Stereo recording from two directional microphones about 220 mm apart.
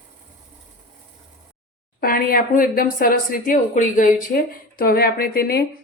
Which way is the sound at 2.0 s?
40° left (ahead or behind).